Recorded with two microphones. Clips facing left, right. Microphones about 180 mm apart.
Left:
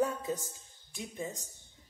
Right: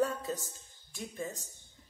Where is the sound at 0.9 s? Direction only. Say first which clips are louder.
Even; 20° left (ahead or behind).